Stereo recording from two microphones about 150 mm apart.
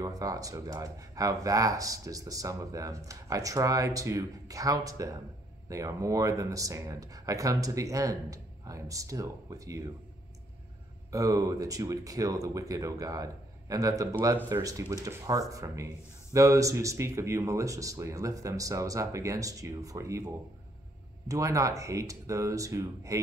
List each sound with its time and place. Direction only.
0.0 s speech: 25° right (ahead or behind)
11.1 s speech: 20° right (ahead or behind)
21.3 s speech: 20° right (ahead or behind)